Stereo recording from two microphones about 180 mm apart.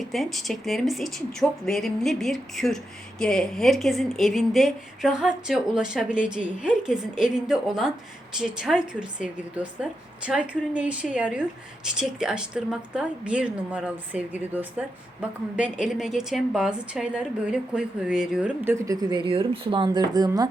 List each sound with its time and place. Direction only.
0.0 s a woman's voice: centre (ahead or behind); by 20.5 s 20° right (ahead or behind)